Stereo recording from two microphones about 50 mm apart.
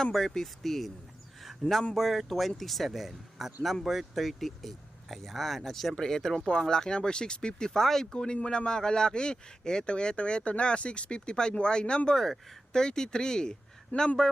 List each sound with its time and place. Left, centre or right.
0.0 s speech: centre
1.6 s a man's voice: centre
12.1 s speech: centre